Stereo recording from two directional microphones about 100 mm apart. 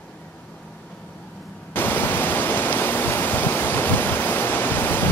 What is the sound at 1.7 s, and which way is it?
Pink noise, 20° left (ahead or behind).